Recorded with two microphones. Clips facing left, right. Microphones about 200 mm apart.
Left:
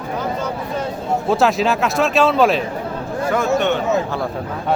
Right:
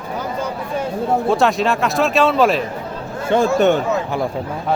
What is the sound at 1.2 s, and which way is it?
Speech, centre (ahead or behind).